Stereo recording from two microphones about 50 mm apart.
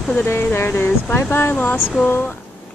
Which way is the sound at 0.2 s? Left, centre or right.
Left.